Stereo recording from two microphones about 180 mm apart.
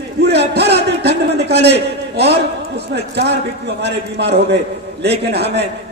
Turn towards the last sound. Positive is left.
turn(degrees=-70)  # may be behind; listen again after turning